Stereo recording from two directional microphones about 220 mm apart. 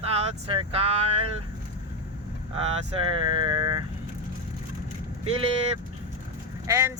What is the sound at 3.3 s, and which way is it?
Speech, 20° right (ahead or behind).